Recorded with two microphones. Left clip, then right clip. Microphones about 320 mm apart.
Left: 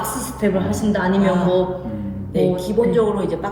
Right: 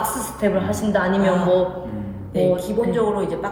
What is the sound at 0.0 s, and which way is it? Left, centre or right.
A woman's voice, centre.